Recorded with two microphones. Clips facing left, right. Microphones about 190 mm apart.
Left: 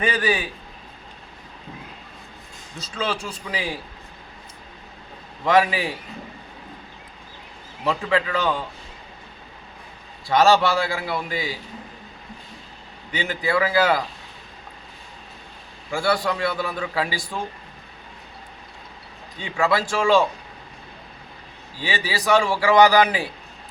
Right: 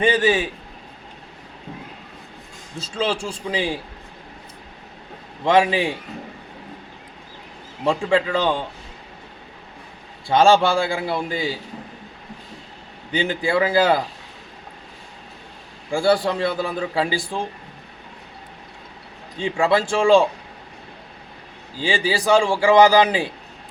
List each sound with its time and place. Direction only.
0.0 s a man's voice: 25° right (ahead or behind)
2.7 s a man's voice: 30° right (ahead or behind)
5.5 s a man's voice: 25° right (ahead or behind)
7.9 s a man's voice: 30° right (ahead or behind)
10.2 s a man's voice: 25° right (ahead or behind)
13.1 s a man's voice: 30° right (ahead or behind)
15.9 s a man's voice: 30° right (ahead or behind)
19.4 s a man's voice: 30° right (ahead or behind)
21.8 s a man's voice: 30° right (ahead or behind)